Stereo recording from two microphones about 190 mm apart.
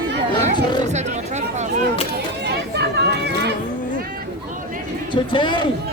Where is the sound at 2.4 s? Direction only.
60° right (ahead or behind).